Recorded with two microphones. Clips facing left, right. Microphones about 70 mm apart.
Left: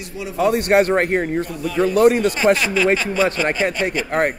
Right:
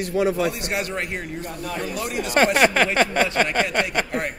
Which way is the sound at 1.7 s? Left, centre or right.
Left.